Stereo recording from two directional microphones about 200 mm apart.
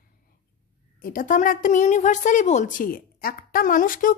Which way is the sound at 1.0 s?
40° left (ahead or behind).